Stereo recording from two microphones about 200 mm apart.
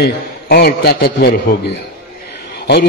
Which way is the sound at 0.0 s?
50° left (ahead or behind).